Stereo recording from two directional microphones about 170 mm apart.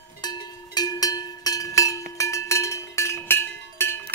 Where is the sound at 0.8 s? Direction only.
20° left (ahead or behind).